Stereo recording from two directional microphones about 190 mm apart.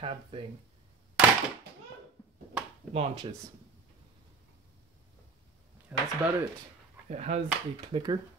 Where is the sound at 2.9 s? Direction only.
30° right (ahead or behind).